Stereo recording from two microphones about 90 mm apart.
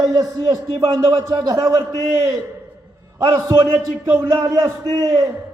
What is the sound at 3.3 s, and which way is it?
Speech, 40° right (ahead or behind).